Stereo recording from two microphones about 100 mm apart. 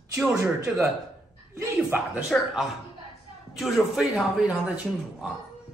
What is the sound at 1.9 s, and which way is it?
A man's voice, 5° right (ahead or behind).